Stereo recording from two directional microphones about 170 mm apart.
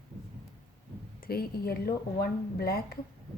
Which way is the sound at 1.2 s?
65° left (ahead or behind).